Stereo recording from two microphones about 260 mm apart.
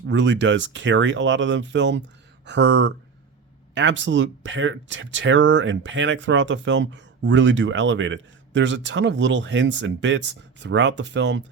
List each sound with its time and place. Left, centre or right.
0.1 s speech: right